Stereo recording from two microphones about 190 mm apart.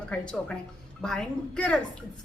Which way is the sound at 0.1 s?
5° left (ahead or behind).